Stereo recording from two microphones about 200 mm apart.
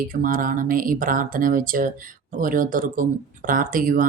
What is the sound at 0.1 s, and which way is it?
Speech, 45° right (ahead or behind).